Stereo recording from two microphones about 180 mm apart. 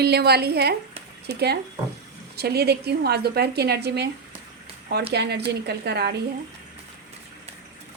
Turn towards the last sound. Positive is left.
turn(degrees=-65)  # may be behind; listen again after turning